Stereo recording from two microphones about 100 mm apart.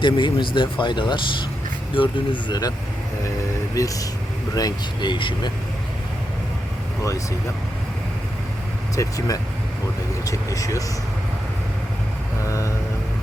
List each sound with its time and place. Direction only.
0.0 s speech: 55° left (ahead or behind)
3.8 s speech: 35° left (ahead or behind)
4.5 s speech: 45° left (ahead or behind)
9.0 s speech: 35° left (ahead or behind)
12.5 s speech: 30° left (ahead or behind)